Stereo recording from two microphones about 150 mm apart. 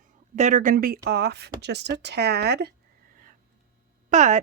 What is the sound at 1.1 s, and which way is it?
Speech, 90° right.